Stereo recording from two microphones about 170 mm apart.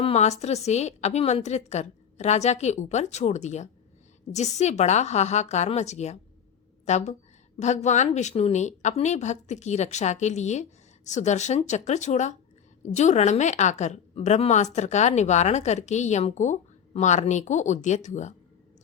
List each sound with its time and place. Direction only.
0.0 s a woman's voice: 40° left (ahead or behind)